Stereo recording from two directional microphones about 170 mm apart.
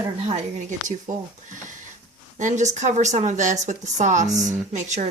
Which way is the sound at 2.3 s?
45° right (ahead or behind).